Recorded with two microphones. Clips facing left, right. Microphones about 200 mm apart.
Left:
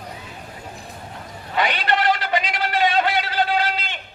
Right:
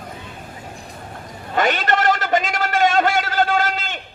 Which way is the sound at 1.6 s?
45° right (ahead or behind).